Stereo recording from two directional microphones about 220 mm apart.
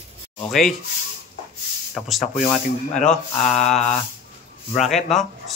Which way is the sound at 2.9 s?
30° left (ahead or behind).